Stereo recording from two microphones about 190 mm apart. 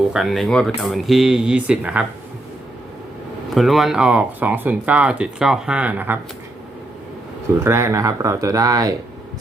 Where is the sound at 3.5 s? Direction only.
Centre (ahead or behind).